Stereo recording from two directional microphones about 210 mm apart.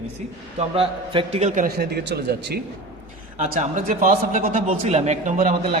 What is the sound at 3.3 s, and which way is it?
A man's voice, 35° right (ahead or behind).